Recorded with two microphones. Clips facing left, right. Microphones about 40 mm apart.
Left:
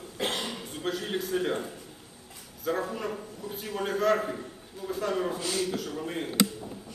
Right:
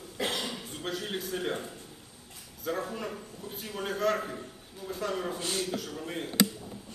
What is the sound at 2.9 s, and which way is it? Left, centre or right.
A man's voice, centre.